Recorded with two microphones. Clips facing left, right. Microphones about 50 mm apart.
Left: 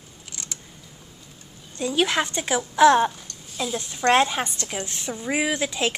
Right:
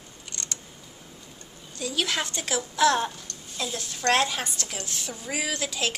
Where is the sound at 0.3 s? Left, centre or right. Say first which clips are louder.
Right 1 dB; centre.